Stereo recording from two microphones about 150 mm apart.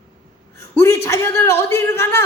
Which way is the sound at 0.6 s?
15° left (ahead or behind).